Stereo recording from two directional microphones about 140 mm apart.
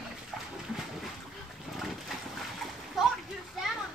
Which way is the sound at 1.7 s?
Centre (ahead or behind).